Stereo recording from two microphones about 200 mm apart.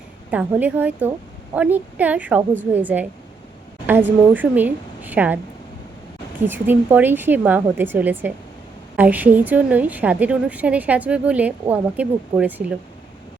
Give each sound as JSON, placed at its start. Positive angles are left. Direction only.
{"t": 0.3, "sound": "a woman's voice", "side_deg": -10}
{"t": 6.4, "sound": "a woman's voice", "side_deg": -10}